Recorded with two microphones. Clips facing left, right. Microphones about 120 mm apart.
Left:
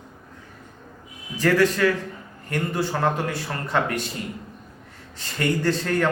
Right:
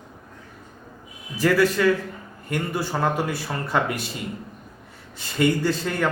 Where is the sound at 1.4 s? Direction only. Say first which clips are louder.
Even; 5° right (ahead or behind).